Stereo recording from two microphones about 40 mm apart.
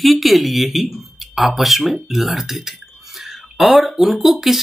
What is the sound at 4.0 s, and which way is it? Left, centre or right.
Speech, centre.